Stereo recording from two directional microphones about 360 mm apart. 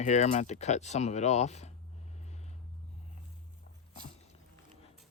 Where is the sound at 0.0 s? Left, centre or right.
Centre.